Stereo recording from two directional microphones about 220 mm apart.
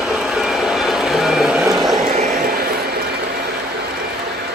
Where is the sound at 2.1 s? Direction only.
35° right (ahead or behind).